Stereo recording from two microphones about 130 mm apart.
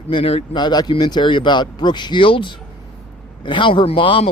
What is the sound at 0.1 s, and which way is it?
Speech, 45° left (ahead or behind).